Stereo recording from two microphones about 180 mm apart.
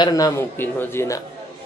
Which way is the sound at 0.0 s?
20° left (ahead or behind).